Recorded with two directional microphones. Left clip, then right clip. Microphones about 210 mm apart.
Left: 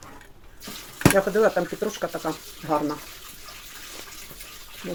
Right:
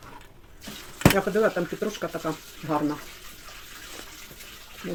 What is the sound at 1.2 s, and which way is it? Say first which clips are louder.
Speech: left 3 dB; 25° right (ahead or behind).